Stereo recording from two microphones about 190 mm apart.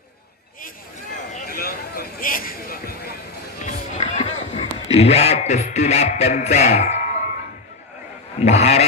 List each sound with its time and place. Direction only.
1.3 s speech: 50° left (ahead or behind)
3.6 s music: 40° left (ahead or behind)
8.4 s a sound: 35° left (ahead or behind)